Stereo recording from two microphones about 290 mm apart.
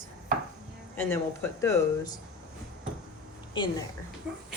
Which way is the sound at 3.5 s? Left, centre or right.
Centre.